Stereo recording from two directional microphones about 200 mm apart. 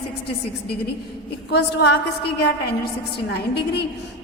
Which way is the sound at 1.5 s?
55° left (ahead or behind).